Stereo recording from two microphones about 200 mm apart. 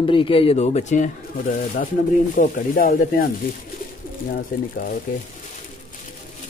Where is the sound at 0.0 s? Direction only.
25° left (ahead or behind); by 3.3 s 45° left (ahead or behind).